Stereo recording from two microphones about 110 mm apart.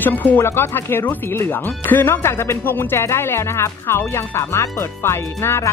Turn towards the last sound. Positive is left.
turn(degrees=20)  # may be behind; listen again after turning